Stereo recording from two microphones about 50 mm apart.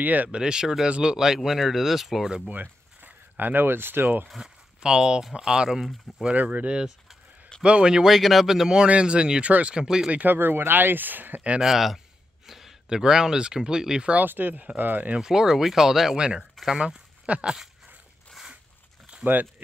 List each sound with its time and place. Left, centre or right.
0.0 s speech: right
0.3 s speech: centre
2.5 s speech: right
4.8 s speech: centre
6.3 s speech: right
7.6 s speech: centre
10.1 s speech: right
11.6 s a man's voice: centre
14.1 s speech: right
15.1 s speech: centre
19.2 s speech: right